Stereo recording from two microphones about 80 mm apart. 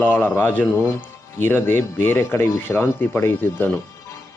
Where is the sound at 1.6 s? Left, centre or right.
Left.